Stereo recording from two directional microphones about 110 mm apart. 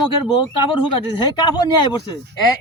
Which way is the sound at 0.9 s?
45° left (ahead or behind).